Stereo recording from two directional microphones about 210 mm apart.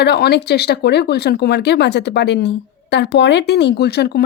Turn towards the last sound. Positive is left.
turn(degrees=50)  # may be behind; listen again after turning